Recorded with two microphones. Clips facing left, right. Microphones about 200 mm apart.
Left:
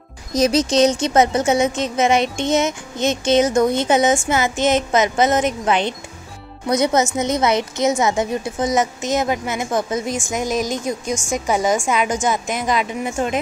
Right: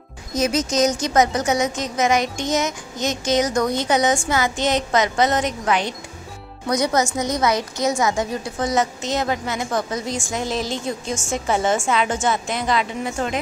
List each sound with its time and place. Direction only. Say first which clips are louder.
0.3 s a woman's voice: left 4 dB; 35° left (ahead or behind); by 13.4 s 20° left (ahead or behind)